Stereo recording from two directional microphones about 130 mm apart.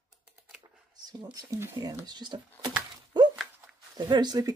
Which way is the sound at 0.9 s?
25° right (ahead or behind).